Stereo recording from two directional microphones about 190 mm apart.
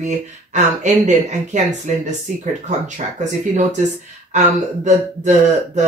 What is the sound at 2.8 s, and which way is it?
Speech, 40° right (ahead or behind).